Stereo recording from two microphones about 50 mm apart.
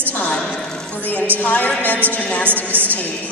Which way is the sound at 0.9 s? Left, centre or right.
Left.